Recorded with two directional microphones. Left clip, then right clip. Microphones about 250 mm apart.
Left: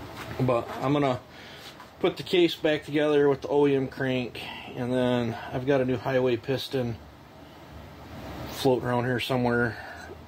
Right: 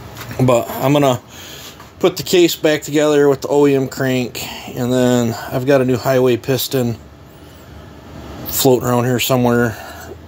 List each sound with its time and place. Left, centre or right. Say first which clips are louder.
0.5 s speech: right 12 dB; right
8.6 s speech: right 11 dB; right